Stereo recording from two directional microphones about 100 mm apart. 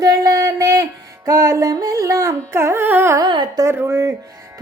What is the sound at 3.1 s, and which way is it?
Speech, 45° right (ahead or behind).